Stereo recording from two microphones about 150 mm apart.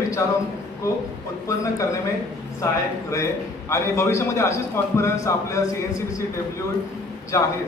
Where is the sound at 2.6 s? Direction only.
20° left (ahead or behind).